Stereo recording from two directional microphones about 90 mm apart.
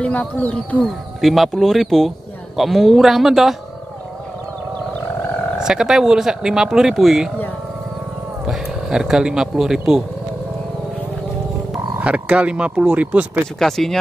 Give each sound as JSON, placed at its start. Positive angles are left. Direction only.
{"t": 0.0, "sound": "speech", "side_deg": 15}
{"t": 0.8, "sound": "speech", "side_deg": 0}
{"t": 5.6, "sound": "speech", "side_deg": -5}
{"t": 8.5, "sound": "speech", "side_deg": -5}
{"t": 12.0, "sound": "speech", "side_deg": -15}
{"t": 13.6, "sound": "speech", "side_deg": 5}